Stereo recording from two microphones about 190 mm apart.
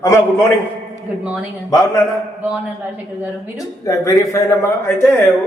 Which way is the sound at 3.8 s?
15° left (ahead or behind).